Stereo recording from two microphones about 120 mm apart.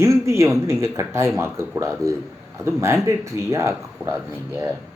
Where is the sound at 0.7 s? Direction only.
25° right (ahead or behind).